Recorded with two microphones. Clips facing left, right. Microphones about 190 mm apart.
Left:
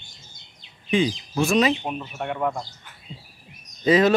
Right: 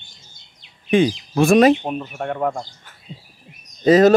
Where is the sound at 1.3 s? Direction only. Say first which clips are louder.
Right 8 dB; 50° right (ahead or behind).